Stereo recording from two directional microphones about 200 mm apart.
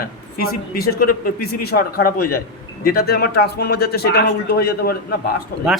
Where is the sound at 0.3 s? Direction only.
50° left (ahead or behind).